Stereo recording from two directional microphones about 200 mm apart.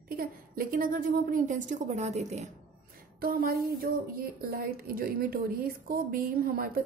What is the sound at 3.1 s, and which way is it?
A woman's voice, 45° right (ahead or behind).